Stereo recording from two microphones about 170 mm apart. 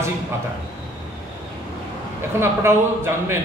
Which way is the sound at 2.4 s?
15° right (ahead or behind).